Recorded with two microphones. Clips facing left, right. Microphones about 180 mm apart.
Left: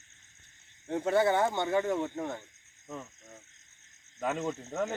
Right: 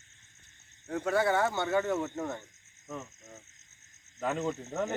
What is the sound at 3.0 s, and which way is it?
Speech, 5° right (ahead or behind).